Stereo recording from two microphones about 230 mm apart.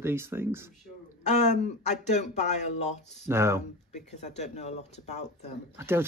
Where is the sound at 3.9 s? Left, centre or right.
Left.